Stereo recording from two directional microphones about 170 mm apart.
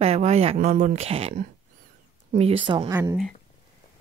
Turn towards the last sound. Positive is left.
turn(degrees=-15)  # may be behind; listen again after turning